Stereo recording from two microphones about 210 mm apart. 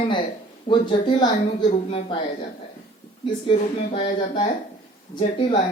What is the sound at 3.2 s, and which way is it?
A woman's voice, 20° left (ahead or behind).